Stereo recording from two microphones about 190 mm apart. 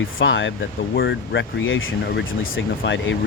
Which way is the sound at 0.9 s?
70° left (ahead or behind).